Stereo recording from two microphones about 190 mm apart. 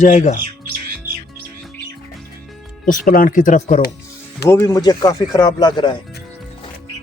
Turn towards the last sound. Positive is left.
turn(degrees=25)  # may be behind; listen again after turning